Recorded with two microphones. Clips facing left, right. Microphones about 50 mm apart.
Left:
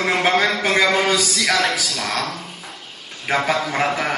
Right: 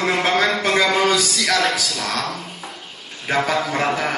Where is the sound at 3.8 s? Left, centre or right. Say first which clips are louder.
Even; centre.